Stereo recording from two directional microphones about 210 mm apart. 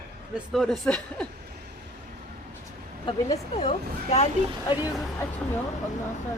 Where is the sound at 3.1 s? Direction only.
20° left (ahead or behind).